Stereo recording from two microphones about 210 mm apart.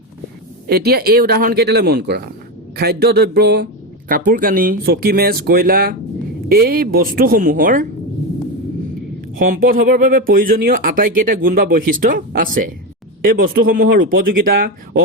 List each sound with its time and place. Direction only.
0.7 s speech: 50° right (ahead or behind)
9.4 s speech: 40° right (ahead or behind)